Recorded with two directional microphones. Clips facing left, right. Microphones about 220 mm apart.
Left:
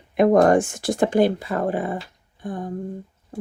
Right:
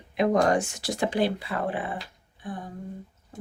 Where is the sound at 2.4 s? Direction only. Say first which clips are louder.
Left 7 dB; 45° left (ahead or behind).